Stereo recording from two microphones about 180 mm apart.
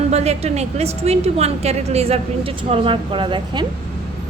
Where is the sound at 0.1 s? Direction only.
35° right (ahead or behind).